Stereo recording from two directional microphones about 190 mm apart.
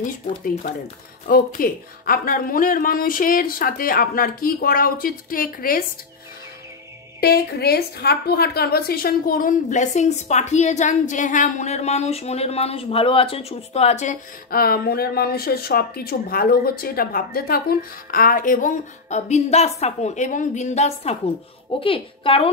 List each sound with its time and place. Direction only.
1.2 s speech: 45° left (ahead or behind)
7.2 s a woman's voice: 55° left (ahead or behind); by 22.5 s 30° left (ahead or behind)